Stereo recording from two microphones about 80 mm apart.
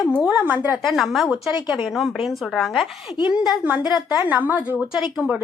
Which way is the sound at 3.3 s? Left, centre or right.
Centre.